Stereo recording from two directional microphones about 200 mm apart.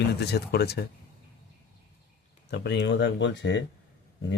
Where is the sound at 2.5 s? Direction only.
60° left (ahead or behind).